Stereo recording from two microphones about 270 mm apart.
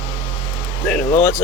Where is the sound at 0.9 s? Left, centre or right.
Centre.